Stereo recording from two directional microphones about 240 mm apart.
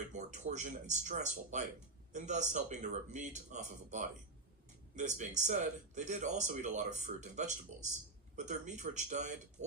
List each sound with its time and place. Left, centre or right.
0.1 s speech: right